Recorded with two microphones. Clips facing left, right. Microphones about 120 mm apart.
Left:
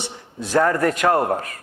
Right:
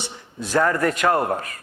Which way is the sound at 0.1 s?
45° left (ahead or behind).